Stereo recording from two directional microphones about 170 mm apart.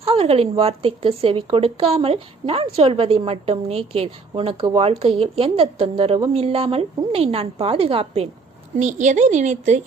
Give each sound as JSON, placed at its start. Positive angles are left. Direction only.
{"t": 0.0, "sound": "speech", "side_deg": -35}
{"t": 8.8, "sound": "speech", "side_deg": -45}